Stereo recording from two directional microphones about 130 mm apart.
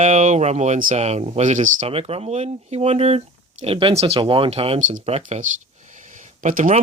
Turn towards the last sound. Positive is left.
turn(degrees=-85)